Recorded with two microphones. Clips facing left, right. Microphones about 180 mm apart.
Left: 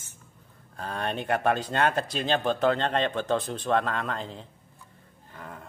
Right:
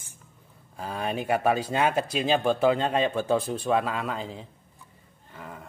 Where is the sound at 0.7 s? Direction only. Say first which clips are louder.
Right 1 dB; 5° right (ahead or behind).